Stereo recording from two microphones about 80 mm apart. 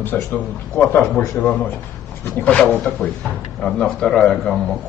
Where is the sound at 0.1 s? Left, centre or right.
Centre.